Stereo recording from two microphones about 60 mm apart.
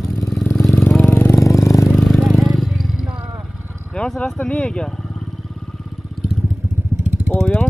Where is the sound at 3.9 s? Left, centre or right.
Centre.